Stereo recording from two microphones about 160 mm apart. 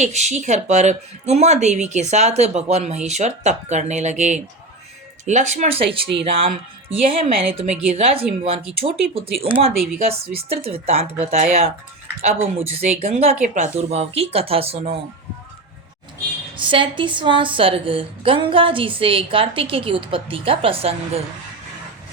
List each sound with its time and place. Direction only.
0.0 s a woman's voice: 45° right (ahead or behind)
9.7 s speech: centre (ahead or behind)
10.3 s a woman's voice: 40° right (ahead or behind)
16.6 s a woman's voice: 30° right (ahead or behind)